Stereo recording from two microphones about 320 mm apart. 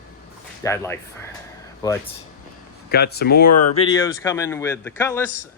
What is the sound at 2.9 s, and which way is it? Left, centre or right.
Speech, left.